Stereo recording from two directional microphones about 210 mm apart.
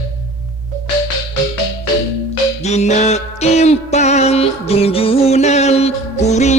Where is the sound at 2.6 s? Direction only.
30° left (ahead or behind).